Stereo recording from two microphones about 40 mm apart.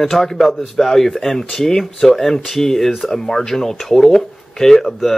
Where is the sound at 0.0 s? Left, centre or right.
Centre.